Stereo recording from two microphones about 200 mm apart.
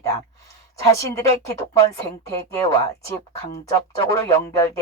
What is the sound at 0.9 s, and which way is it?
Speech, 15° left (ahead or behind).